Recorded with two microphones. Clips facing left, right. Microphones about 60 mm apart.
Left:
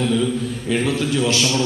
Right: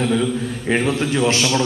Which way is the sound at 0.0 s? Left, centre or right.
Right.